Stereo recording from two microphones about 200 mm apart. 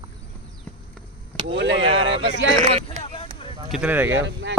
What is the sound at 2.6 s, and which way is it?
Speech, 30° right (ahead or behind).